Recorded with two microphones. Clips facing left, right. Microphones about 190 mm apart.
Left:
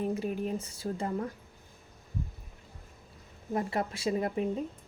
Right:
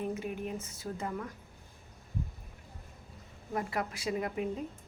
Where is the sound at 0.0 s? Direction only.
35° left (ahead or behind).